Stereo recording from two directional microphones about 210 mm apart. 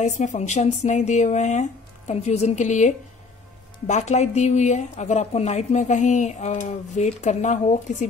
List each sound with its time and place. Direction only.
0.0 s speech: 35° left (ahead or behind)